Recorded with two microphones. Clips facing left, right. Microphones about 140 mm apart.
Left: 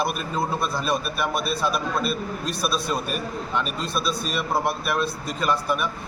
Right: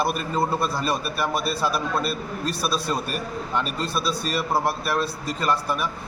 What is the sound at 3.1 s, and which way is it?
A man's voice, centre (ahead or behind).